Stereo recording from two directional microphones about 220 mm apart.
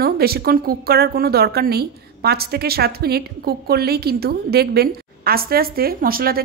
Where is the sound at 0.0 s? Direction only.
45° right (ahead or behind).